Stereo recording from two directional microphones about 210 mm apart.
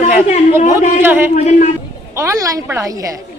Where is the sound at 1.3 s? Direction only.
35° left (ahead or behind).